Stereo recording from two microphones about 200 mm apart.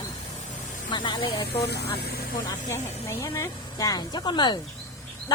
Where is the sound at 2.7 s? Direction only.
15° left (ahead or behind).